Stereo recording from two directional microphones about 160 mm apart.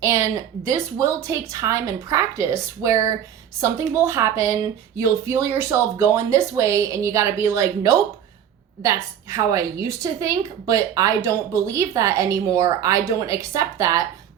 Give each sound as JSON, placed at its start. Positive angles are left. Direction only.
{"t": 0.0, "sound": "a woman's voice", "side_deg": -20}